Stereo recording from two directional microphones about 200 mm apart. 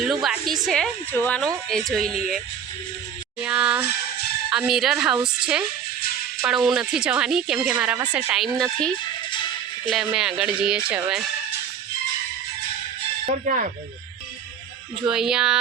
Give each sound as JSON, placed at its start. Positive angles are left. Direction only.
{"t": 0.0, "sound": "a woman's voice", "side_deg": 0}
{"t": 3.4, "sound": "a woman's voice", "side_deg": -5}
{"t": 9.9, "sound": "a woman's voice", "side_deg": 0}
{"t": 13.4, "sound": "speech", "side_deg": -40}
{"t": 15.0, "sound": "a woman's voice", "side_deg": -5}